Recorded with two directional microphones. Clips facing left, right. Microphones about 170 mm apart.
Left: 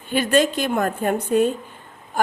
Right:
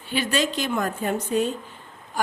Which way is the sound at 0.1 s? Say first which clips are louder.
Left 6 dB; 50° left (ahead or behind).